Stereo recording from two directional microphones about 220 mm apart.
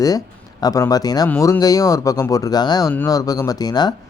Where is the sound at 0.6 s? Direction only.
15° left (ahead or behind).